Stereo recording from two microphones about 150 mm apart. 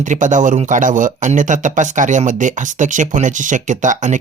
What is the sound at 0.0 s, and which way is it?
Speech, 55° right (ahead or behind).